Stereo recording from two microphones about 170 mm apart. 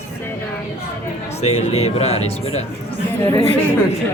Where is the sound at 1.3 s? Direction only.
40° left (ahead or behind).